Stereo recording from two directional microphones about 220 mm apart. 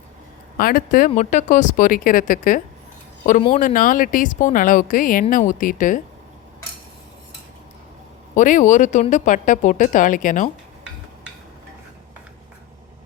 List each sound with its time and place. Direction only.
0.5 s speech: 40° left (ahead or behind)
8.4 s speech: 35° left (ahead or behind)